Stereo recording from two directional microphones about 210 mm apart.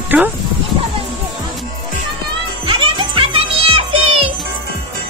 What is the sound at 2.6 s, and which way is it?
Music, 25° right (ahead or behind).